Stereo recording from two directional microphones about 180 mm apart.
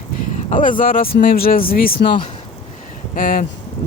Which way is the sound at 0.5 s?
50° left (ahead or behind).